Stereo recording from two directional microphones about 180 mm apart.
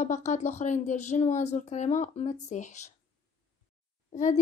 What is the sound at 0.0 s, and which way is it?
A woman's voice, 40° left (ahead or behind).